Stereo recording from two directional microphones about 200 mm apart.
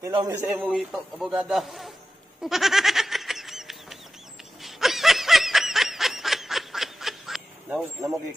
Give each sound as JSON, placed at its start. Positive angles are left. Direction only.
{"t": 0.0, "sound": "speech", "side_deg": -20}
{"t": 0.5, "sound": "a man's voice", "side_deg": -5}
{"t": 2.4, "sound": "a sound", "side_deg": 0}
{"t": 4.6, "sound": "snicker", "side_deg": 0}